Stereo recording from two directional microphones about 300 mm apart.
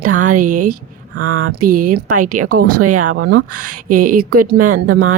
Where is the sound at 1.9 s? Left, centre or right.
Right.